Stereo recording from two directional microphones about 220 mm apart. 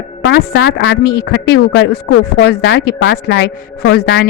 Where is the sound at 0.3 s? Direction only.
50° left (ahead or behind).